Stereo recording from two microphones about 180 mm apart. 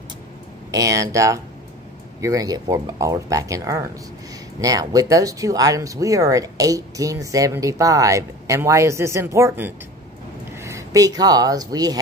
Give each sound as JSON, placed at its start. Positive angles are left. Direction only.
{"t": 0.7, "sound": "speech", "side_deg": -20}